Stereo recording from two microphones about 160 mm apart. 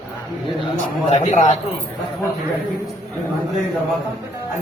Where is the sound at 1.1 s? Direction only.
50° left (ahead or behind).